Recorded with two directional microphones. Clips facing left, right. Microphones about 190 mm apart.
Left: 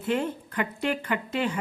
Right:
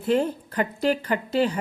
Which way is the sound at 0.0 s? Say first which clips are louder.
Right 5 dB; 35° right (ahead or behind).